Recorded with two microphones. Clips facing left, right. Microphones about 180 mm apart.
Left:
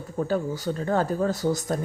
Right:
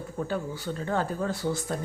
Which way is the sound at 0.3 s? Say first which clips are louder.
Left 7 dB; 40° left (ahead or behind).